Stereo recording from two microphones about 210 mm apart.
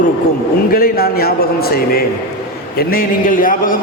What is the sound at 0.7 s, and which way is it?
A man's voice, 45° left (ahead or behind).